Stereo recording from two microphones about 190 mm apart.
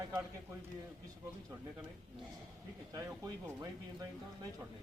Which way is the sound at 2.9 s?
20° right (ahead or behind).